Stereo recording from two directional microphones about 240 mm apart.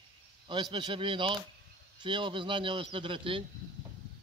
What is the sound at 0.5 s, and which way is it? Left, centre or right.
Speech, centre.